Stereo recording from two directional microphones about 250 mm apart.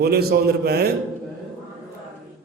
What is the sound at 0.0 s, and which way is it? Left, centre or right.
Speech, right.